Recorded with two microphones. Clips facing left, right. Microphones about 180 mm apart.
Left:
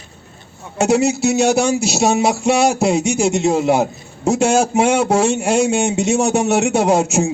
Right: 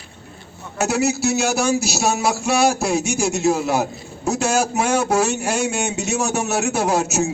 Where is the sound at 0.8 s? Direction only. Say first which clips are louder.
Left 5 dB; 25° left (ahead or behind).